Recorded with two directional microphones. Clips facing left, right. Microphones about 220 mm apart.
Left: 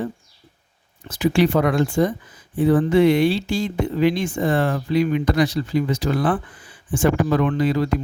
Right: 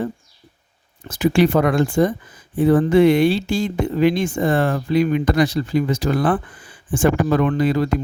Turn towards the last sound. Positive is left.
turn(degrees=-50)  # may be behind; listen again after turning